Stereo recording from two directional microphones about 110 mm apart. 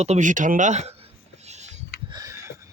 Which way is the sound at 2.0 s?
35° right (ahead or behind).